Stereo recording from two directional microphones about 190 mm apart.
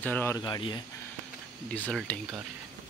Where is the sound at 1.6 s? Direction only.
5° left (ahead or behind).